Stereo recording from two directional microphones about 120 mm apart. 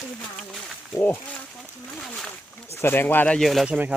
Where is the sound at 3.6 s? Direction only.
10° right (ahead or behind).